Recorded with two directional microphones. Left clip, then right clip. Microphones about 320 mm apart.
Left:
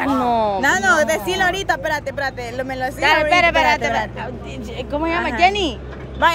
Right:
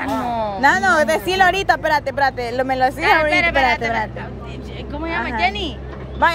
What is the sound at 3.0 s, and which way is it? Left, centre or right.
A woman's voice, centre.